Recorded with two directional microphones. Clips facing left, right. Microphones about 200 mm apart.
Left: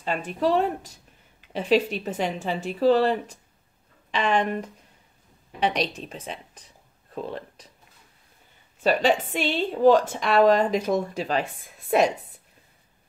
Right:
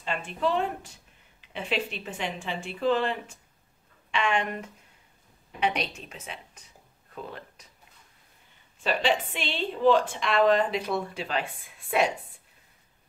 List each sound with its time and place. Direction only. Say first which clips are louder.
0.0 s a woman's voice: left 4 dB; 40° left (ahead or behind)
8.8 s a woman's voice: left 5 dB; 45° left (ahead or behind)